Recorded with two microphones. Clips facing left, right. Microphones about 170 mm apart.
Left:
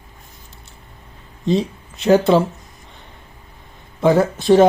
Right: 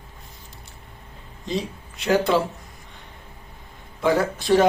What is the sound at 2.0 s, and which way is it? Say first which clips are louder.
Speech: left 6 dB; 25° left (ahead or behind).